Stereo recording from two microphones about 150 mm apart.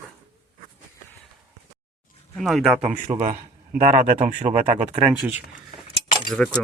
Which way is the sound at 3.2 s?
60° right (ahead or behind).